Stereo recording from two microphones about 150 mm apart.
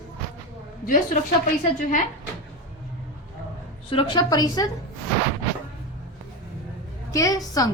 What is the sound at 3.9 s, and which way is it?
Speech, 35° left (ahead or behind).